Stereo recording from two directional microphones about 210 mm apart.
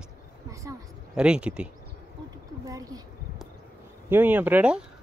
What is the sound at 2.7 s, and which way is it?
Speech, 15° right (ahead or behind).